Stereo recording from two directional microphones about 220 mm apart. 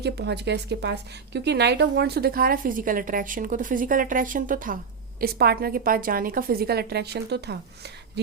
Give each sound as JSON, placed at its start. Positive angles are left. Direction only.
{"t": 0.0, "sound": "a woman's voice", "side_deg": -50}